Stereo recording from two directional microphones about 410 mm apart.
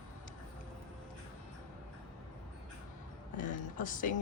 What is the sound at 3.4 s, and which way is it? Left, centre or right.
Speech, centre.